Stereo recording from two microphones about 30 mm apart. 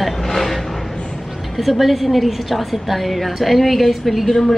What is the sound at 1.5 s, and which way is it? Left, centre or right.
A woman's voice, centre.